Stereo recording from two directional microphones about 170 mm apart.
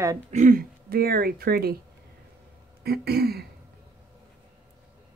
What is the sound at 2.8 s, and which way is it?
Speech, 70° right (ahead or behind).